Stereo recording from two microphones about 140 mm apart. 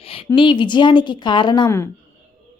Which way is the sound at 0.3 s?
35° left (ahead or behind).